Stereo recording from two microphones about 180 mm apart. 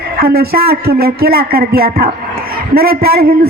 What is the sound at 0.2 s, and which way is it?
A woman's voice, 55° right (ahead or behind).